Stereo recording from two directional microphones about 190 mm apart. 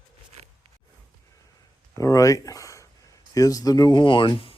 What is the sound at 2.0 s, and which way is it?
Speech, 15° left (ahead or behind).